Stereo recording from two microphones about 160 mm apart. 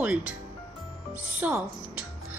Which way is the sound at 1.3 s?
10° right (ahead or behind).